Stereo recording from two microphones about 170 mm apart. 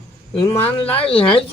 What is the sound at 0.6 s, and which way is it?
Speech, 35° left (ahead or behind).